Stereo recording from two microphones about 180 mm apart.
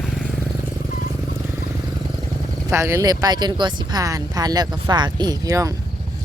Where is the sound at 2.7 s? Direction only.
15° right (ahead or behind).